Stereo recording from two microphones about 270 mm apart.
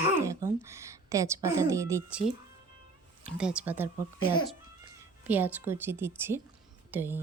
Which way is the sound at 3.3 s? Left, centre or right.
Centre.